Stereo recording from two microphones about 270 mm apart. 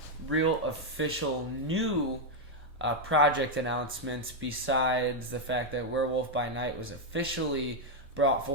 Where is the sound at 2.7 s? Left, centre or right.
Right.